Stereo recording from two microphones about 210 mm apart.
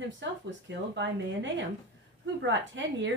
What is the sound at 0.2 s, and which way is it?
Speech, 60° right (ahead or behind).